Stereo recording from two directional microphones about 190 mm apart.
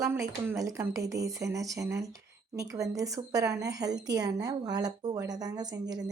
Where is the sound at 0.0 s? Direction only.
15° right (ahead or behind).